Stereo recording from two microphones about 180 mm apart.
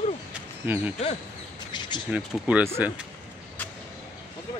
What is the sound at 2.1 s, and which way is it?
Speech, 10° right (ahead or behind).